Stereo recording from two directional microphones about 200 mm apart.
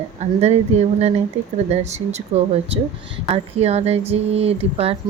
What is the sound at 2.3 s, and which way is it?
Speech, 30° right (ahead or behind).